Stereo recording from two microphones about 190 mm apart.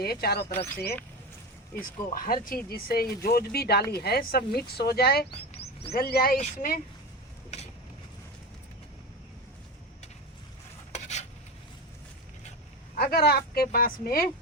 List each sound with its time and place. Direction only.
0.0 s speech: 55° left (ahead or behind)
2.1 s speech: 45° left (ahead or behind)
10.9 s rub: 35° left (ahead or behind)
13.0 s speech: 55° left (ahead or behind)